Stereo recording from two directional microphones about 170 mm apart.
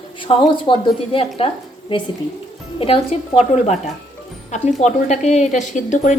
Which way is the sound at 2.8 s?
30° left (ahead or behind).